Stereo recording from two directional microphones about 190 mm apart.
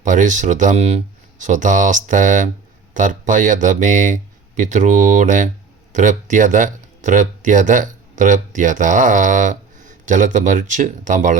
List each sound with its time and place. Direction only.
0.0 s speech: 40° right (ahead or behind)